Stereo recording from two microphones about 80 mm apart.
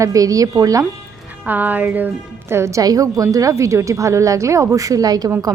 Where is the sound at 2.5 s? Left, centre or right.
Right.